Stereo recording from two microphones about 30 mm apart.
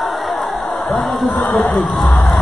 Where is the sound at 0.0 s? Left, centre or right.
Centre.